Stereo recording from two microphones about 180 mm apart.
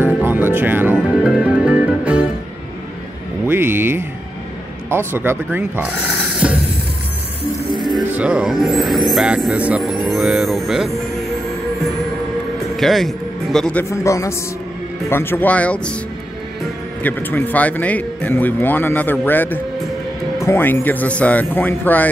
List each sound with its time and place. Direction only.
0.0 s music: 10° right (ahead or behind)
3.4 s music: 10° right (ahead or behind)
4.8 s speech: 15° right (ahead or behind)
7.7 s music: 25° right (ahead or behind)
8.1 s speech: 5° right (ahead or behind)
12.7 s speech: centre (ahead or behind)
17.0 s speech: 10° left (ahead or behind)